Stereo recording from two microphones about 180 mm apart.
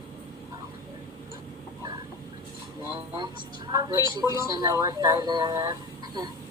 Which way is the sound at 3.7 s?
20° right (ahead or behind).